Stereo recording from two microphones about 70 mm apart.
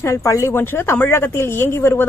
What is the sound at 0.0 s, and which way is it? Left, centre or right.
A woman's voice, left.